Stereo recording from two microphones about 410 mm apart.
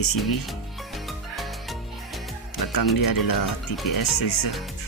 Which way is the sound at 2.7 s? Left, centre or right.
Left.